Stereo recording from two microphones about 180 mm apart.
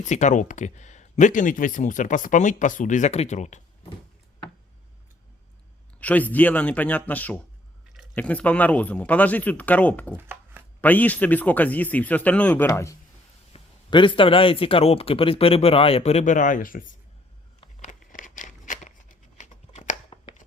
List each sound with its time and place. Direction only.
0.0 s speech: 40° left (ahead or behind)
6.0 s a man's voice: 10° left (ahead or behind)
10.2 s chopping: 10° right (ahead or behind)
10.8 s a man's voice: 10° left (ahead or behind)
13.5 s a man's voice: 25° left (ahead or behind); by 16.9 s 50° left (ahead or behind)
18.1 s a sound: 45° left (ahead or behind)